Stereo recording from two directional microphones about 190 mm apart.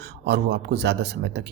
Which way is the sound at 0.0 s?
60° right (ahead or behind).